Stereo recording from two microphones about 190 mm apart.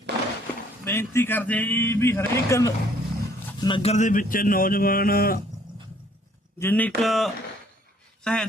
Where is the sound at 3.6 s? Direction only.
30° left (ahead or behind); by 5.4 s 50° left (ahead or behind).